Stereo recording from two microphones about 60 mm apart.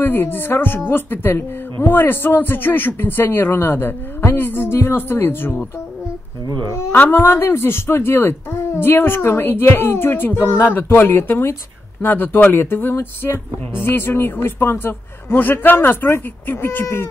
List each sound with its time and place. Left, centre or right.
0.0 s speech: left
6.9 s speech: left
16.8 s a sound: left